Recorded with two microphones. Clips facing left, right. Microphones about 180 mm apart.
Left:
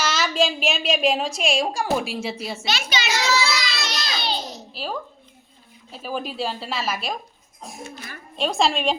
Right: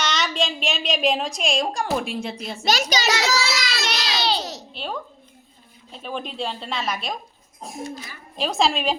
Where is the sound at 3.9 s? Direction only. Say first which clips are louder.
Right 7 dB; 80° right.